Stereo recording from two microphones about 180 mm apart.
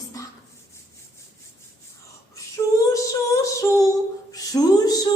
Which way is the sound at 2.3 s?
15° left (ahead or behind).